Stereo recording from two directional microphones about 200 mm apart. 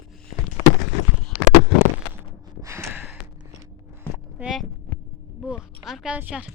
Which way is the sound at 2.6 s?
10° right (ahead or behind).